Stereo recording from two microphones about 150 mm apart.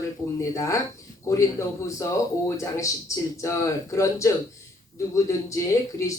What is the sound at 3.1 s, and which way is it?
Speech, 20° left (ahead or behind).